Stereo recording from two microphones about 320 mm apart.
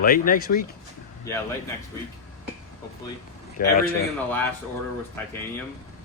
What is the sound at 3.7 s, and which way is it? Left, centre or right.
Speech, left.